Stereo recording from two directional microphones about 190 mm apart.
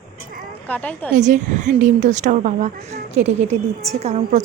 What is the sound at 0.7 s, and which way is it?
Speech, 10° left (ahead or behind).